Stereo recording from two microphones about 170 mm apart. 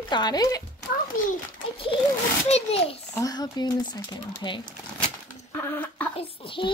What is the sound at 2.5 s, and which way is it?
Speech, 35° left (ahead or behind).